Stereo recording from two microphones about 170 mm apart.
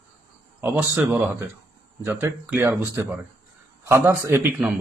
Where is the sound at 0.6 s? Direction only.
10° right (ahead or behind).